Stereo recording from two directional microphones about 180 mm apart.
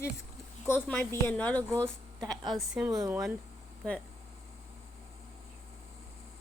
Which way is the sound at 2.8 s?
15° right (ahead or behind).